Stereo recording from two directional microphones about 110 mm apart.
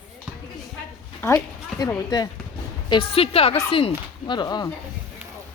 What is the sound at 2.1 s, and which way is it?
Speech, 35° left (ahead or behind).